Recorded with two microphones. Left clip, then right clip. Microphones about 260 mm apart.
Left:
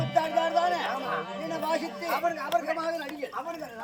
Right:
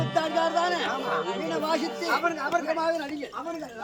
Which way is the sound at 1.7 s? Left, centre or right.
Centre.